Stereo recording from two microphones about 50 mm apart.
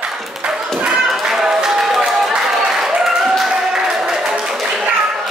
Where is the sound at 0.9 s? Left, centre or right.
Centre.